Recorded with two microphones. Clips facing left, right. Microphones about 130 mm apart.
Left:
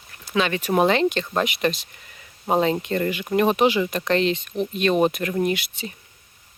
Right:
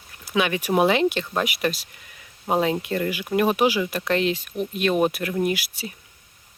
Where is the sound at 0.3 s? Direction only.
10° right (ahead or behind).